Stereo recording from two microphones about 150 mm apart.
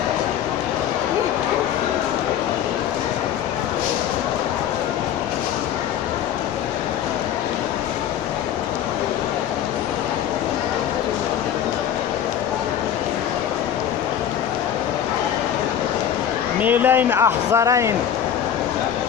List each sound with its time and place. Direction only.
16.6 s speech: 10° right (ahead or behind)